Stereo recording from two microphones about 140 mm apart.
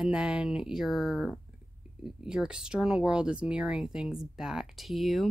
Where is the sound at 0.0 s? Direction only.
5° right (ahead or behind).